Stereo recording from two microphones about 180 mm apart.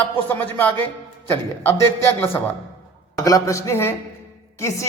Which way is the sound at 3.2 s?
15° left (ahead or behind).